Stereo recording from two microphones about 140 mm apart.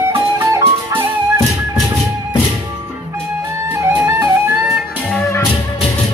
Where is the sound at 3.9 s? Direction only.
15° right (ahead or behind).